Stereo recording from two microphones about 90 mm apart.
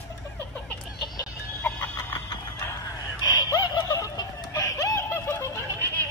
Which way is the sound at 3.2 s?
45° left (ahead or behind).